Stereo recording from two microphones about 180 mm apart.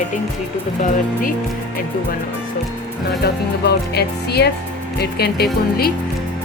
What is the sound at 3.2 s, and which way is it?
A woman's voice, 65° left (ahead or behind).